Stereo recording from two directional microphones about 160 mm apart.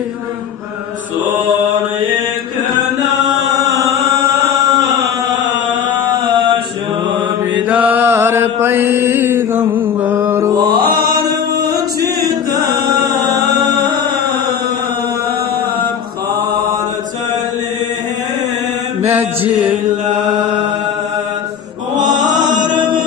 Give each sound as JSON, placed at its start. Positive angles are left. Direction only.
{"t": 7.7, "sound": "mantra", "side_deg": -10}
{"t": 12.0, "sound": "chant", "side_deg": -20}